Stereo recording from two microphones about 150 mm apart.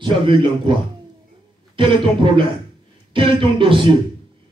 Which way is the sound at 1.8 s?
35° right (ahead or behind).